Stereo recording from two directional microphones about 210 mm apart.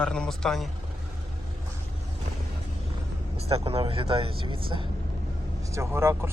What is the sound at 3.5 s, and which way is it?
Speech, 30° right (ahead or behind).